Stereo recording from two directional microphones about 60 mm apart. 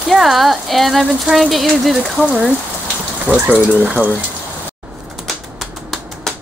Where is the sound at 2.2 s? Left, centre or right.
Centre.